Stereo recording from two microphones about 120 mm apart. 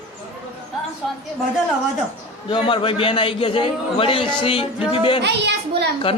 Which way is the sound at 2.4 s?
45° left (ahead or behind).